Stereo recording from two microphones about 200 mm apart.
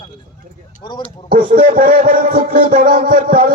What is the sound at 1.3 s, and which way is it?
A man's voice, 45° right (ahead or behind).